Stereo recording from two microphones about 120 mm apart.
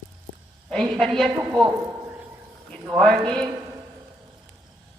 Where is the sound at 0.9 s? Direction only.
5° left (ahead or behind).